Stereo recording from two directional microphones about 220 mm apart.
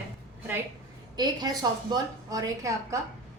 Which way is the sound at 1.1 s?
20° right (ahead or behind).